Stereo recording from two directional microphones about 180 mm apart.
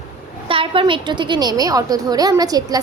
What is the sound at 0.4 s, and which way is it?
A woman's voice, 30° right (ahead or behind).